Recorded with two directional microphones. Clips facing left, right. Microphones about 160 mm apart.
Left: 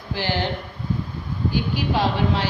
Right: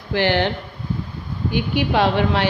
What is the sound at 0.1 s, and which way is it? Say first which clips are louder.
Speech: right 7 dB; 65° right (ahead or behind).